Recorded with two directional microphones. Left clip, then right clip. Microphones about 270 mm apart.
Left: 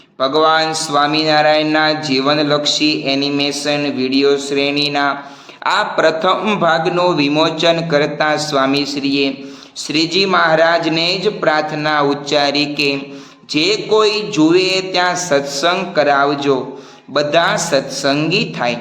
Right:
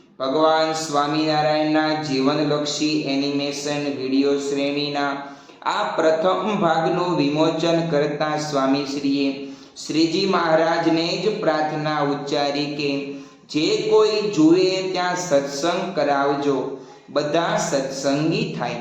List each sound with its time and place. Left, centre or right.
0.2 s speech: left